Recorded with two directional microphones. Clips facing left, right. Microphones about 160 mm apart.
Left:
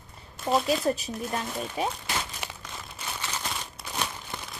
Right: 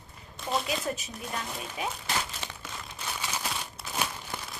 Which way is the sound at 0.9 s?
35° left (ahead or behind).